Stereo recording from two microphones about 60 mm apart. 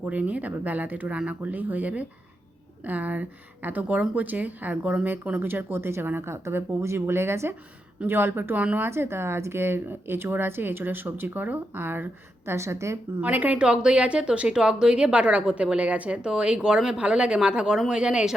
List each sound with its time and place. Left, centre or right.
0.0 s speech: right
12.5 s speech: right
13.2 s speech: right
13.6 s a woman's voice: centre